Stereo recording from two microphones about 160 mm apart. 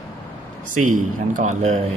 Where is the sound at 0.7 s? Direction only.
55° right (ahead or behind).